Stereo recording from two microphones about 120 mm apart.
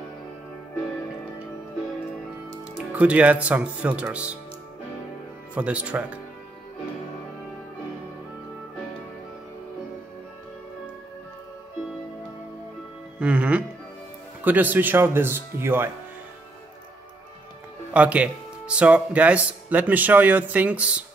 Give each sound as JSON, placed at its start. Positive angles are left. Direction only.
{"t": 2.9, "sound": "speech", "side_deg": -10}
{"t": 5.5, "sound": "speech", "side_deg": -10}
{"t": 13.2, "sound": "speech", "side_deg": -10}
{"t": 17.9, "sound": "speech", "side_deg": -10}